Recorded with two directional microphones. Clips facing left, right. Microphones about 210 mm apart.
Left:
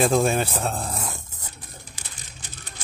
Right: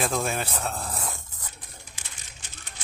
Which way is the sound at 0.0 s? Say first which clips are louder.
Left 7 dB; 30° left (ahead or behind).